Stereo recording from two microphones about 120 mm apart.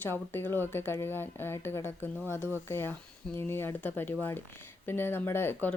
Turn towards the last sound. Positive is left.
turn(degrees=15)  # may be behind; listen again after turning